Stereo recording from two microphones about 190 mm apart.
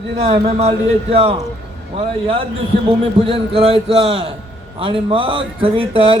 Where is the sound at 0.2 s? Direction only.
30° right (ahead or behind).